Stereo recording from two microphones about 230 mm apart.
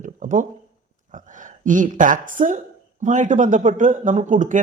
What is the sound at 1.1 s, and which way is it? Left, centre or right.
Speech, right.